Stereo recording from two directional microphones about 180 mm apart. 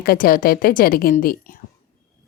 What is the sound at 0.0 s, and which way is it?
A woman's voice, 55° left (ahead or behind).